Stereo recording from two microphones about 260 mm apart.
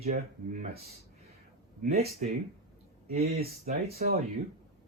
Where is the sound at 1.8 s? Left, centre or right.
Right.